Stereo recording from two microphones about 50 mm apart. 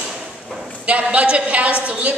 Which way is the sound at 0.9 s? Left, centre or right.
Right.